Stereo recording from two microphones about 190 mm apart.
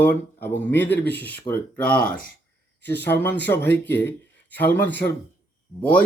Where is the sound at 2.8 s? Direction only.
10° left (ahead or behind).